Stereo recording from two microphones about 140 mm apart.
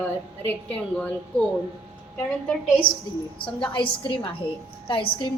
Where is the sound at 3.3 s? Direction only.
35° left (ahead or behind).